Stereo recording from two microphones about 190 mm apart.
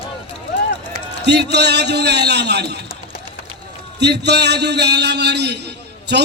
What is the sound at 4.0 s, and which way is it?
A man's voice, 60° right (ahead or behind).